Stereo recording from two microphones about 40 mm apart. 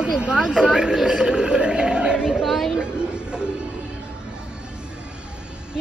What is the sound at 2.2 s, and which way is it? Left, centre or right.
Chatter, centre.